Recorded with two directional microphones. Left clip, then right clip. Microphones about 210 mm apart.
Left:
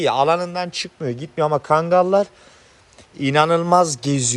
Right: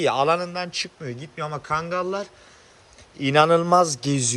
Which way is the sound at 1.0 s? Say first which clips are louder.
Left 10 dB; 5° left (ahead or behind).